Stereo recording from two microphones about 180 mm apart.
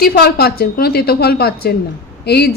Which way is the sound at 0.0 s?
60° left (ahead or behind).